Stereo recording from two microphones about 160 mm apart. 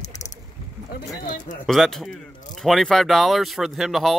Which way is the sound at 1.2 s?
65° left (ahead or behind).